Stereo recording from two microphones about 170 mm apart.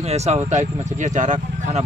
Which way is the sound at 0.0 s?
40° right (ahead or behind).